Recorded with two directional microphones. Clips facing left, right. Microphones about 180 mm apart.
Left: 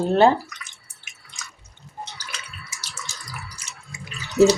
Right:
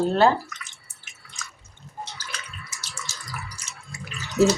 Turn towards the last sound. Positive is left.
turn(degrees=15)  # may be behind; listen again after turning